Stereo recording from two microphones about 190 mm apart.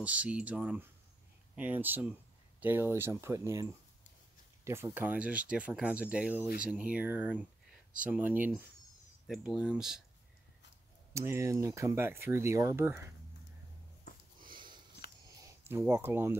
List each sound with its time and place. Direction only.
0.0 s speech: 5° right (ahead or behind)
4.6 s speech: 15° right (ahead or behind)
11.1 s speech: 15° right (ahead or behind)
14.5 s sniff: 25° right (ahead or behind)
15.4 s speech: 10° right (ahead or behind)